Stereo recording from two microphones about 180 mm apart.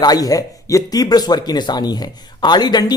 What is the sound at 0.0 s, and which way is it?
Speech, 20° left (ahead or behind).